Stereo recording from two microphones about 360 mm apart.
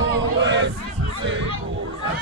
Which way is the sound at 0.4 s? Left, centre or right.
Right.